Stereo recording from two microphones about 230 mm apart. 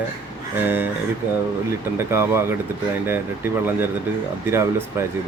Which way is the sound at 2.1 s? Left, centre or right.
Centre.